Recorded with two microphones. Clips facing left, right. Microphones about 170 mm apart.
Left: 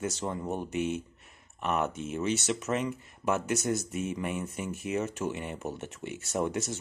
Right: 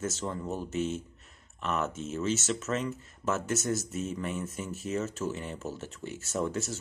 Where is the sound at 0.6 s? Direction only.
15° left (ahead or behind).